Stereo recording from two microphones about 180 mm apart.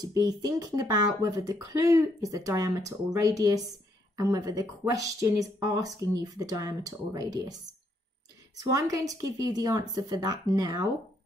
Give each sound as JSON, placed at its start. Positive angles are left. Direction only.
{"t": 0.0, "sound": "speech", "side_deg": -20}
{"t": 8.5, "sound": "speech", "side_deg": -20}